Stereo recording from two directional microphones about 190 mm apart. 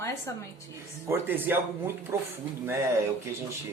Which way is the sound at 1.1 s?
10° right (ahead or behind).